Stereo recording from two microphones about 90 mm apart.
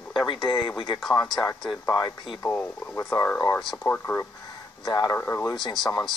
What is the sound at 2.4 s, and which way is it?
Speech, 25° left (ahead or behind).